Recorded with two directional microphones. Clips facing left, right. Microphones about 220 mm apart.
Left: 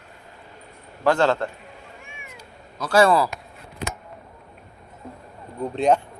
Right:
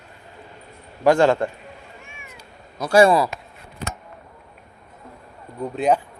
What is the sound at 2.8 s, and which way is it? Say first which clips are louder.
Speech: right 3 dB; 10° right (ahead or behind).